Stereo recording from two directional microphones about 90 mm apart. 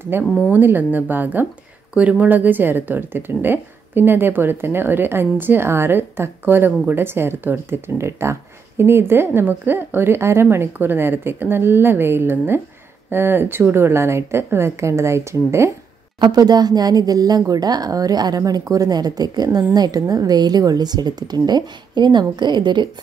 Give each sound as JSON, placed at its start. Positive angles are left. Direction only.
{"t": 0.1, "sound": "a woman's voice", "side_deg": -25}
{"t": 16.2, "sound": "a woman's voice", "side_deg": -50}